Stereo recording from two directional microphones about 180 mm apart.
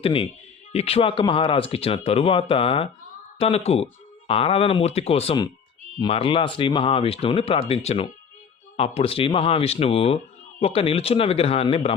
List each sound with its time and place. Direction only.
0.0 s speech: 30° left (ahead or behind)